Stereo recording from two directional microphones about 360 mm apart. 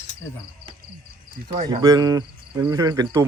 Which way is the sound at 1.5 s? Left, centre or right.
Centre.